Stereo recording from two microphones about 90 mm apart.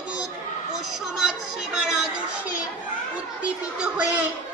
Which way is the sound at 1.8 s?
10° right (ahead or behind).